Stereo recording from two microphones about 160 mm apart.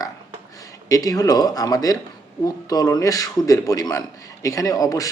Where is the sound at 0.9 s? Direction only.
20° left (ahead or behind).